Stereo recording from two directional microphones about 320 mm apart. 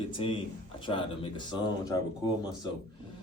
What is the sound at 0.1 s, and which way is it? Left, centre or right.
Speech, centre.